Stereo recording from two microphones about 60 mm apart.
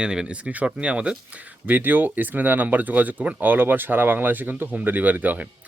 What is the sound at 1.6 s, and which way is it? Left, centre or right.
Speech, right.